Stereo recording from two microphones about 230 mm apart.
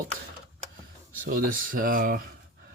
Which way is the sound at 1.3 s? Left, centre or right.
Right.